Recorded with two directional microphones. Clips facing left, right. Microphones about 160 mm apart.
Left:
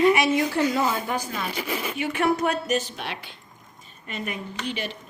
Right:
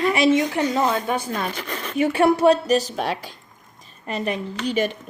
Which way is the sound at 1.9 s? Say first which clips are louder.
Right 7 dB; 35° right (ahead or behind).